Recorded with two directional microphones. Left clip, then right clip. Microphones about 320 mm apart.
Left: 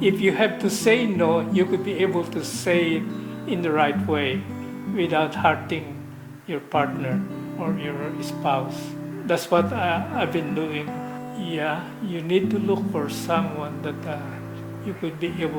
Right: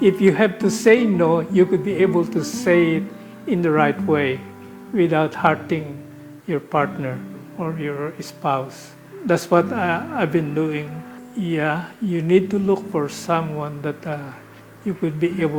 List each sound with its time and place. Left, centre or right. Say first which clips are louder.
0.0 s speech: right 4 dB; right